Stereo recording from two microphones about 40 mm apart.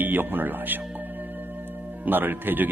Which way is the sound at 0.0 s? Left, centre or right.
Right.